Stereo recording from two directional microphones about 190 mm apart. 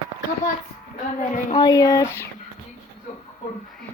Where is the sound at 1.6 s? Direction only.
20° left (ahead or behind).